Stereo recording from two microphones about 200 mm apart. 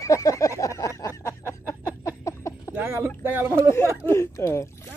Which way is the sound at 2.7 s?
10° right (ahead or behind).